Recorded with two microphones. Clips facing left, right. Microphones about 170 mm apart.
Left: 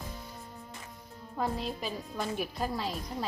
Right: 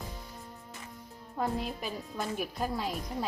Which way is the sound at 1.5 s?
55° right (ahead or behind).